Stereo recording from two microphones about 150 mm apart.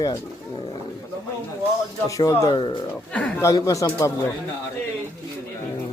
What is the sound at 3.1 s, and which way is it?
Speech, 10° left (ahead or behind).